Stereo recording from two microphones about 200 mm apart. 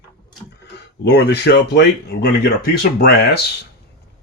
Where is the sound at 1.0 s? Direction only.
55° left (ahead or behind).